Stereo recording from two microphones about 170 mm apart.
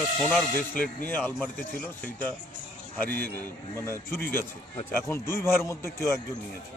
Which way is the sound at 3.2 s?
65° right (ahead or behind).